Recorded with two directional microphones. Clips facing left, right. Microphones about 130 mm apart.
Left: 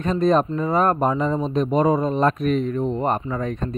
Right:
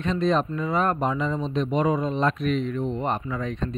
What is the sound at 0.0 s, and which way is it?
Speech, 45° left (ahead or behind).